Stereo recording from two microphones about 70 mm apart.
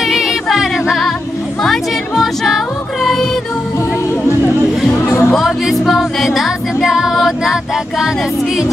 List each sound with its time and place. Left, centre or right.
0.0 s music: centre
4.9 s music: left
5.3 s music: centre